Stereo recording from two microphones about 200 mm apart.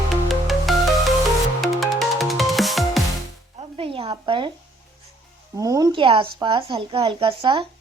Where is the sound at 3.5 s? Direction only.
25° right (ahead or behind).